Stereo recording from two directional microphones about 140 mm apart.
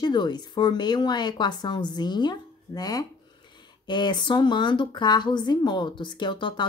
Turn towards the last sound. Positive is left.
turn(degrees=35)  # may be behind; listen again after turning